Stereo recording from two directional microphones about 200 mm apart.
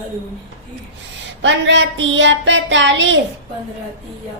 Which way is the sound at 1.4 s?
65° right (ahead or behind).